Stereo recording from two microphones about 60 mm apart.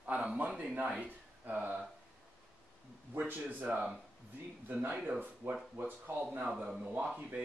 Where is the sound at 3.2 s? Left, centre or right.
Right.